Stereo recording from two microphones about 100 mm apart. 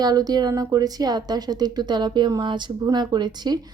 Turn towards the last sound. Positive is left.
turn(degrees=-45)  # may be behind; listen again after turning